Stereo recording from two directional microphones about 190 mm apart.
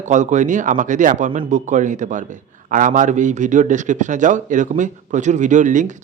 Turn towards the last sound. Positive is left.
turn(degrees=-40)  # may be behind; listen again after turning